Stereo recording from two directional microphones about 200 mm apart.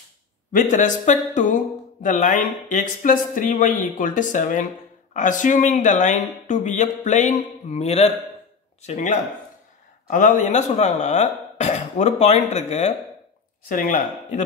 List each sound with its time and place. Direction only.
0.5 s speech: 40° left (ahead or behind)